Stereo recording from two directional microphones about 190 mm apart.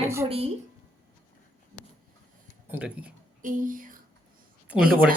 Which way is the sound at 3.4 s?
45° right (ahead or behind).